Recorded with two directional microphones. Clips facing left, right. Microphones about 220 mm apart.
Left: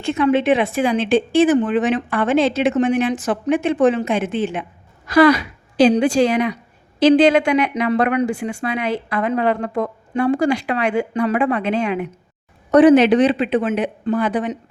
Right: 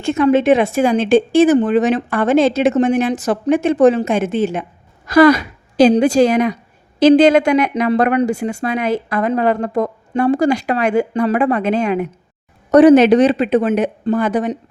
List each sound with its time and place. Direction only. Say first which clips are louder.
0.0 s a woman's voice: right 3 dB; 45° right (ahead or behind)